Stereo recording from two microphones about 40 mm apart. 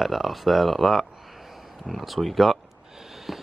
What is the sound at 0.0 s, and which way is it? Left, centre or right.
Speech, centre.